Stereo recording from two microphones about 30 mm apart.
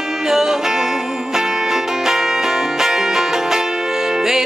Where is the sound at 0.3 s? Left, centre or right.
Centre.